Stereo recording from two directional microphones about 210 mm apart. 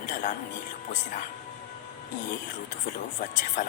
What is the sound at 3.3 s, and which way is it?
Speech, 35° left (ahead or behind).